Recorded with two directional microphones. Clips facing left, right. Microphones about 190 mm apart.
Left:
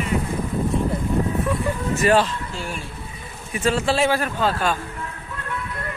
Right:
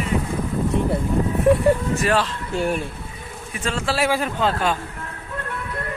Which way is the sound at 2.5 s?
55° right (ahead or behind).